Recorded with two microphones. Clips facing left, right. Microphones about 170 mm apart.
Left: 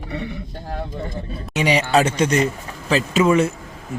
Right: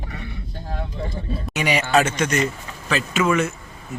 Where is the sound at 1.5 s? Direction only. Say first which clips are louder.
Left 2 dB; 30° left (ahead or behind).